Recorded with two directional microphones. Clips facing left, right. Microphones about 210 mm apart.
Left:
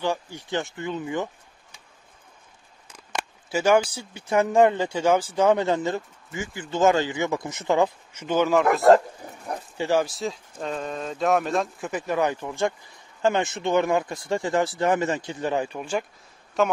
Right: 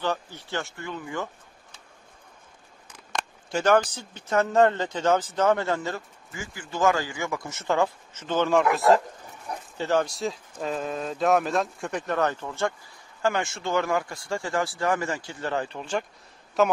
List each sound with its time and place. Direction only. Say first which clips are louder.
0.0 s speech: left 2 dB; 15° left (ahead or behind)
3.2 s speech: left 2 dB; 5° left (ahead or behind)
16.6 s speech: right 1 dB; centre (ahead or behind)